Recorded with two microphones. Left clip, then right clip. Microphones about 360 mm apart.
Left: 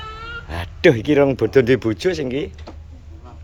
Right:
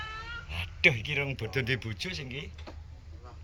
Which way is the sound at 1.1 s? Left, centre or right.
Left.